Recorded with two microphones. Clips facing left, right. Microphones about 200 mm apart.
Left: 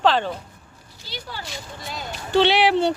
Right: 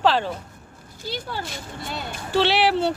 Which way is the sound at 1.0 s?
50° right (ahead or behind).